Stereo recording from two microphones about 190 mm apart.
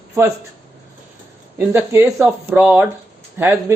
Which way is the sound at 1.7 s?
15° right (ahead or behind).